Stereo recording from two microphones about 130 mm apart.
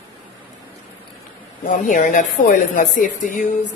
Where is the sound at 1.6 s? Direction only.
90° left.